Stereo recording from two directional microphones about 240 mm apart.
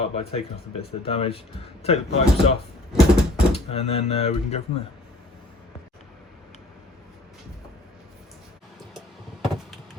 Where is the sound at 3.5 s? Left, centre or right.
Left.